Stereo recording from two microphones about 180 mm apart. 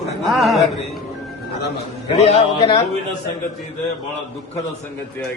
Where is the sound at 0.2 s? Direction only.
Centre (ahead or behind).